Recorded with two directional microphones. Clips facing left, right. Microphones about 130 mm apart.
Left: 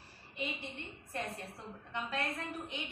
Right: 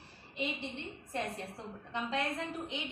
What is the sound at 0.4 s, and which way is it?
A woman's voice, 20° right (ahead or behind).